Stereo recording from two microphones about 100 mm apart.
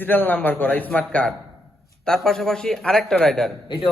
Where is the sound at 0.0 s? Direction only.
20° left (ahead or behind).